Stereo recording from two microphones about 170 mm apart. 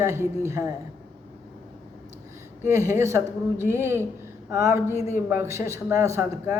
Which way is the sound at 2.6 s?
15° right (ahead or behind).